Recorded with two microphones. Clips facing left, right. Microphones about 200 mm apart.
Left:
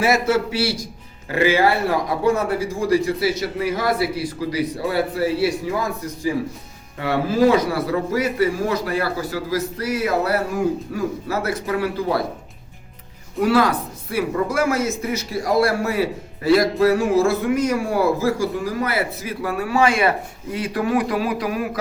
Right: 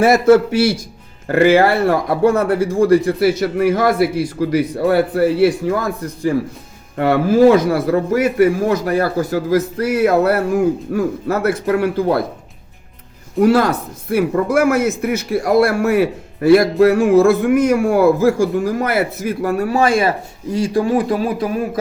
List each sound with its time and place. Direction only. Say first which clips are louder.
0.0 s a man's voice: right 8 dB; 50° right (ahead or behind)
7.0 s a man's voice: right 6 dB; 55° right (ahead or behind)
13.4 s a man's voice: right 4 dB; 45° right (ahead or behind); by 21.8 s 30° right (ahead or behind)